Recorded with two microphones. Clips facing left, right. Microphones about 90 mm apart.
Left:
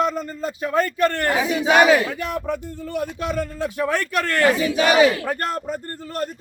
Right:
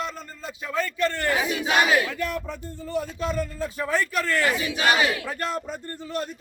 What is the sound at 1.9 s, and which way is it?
A man's voice, 70° left (ahead or behind).